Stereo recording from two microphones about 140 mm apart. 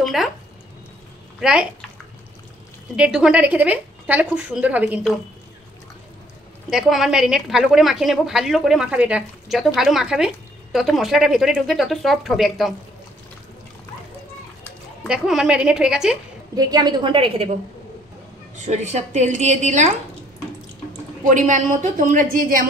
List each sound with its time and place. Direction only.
0.0 s speech: centre (ahead or behind)
1.4 s a woman's voice: 5° right (ahead or behind)
3.0 s a woman's voice: 5° right (ahead or behind)
6.7 s a woman's voice: centre (ahead or behind)
15.0 s a woman's voice: 5° right (ahead or behind)
16.5 s a woman's voice: 30° right (ahead or behind)
18.6 s a woman's voice: 55° right (ahead or behind)
21.3 s a woman's voice: 60° right (ahead or behind); by 22.7 s 75° right (ahead or behind)